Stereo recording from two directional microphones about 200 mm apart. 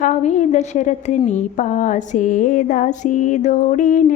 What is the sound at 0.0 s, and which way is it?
A woman's voice, 35° left (ahead or behind).